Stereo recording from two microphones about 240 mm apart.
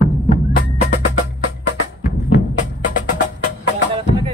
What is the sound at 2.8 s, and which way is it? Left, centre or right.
Music, left.